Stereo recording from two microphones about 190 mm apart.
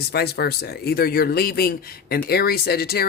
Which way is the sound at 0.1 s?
60° left (ahead or behind).